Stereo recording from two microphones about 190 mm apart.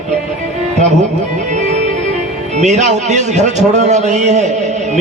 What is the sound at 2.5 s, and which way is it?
A man's voice, 35° right (ahead or behind).